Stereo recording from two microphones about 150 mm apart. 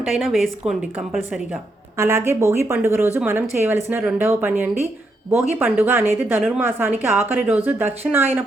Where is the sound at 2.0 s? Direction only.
15° right (ahead or behind).